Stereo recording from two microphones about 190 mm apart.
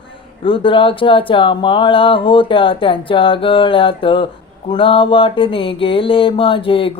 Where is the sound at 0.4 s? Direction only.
25° left (ahead or behind).